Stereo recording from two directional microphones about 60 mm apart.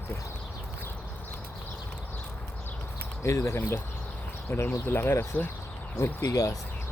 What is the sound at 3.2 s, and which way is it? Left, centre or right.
Speech, left.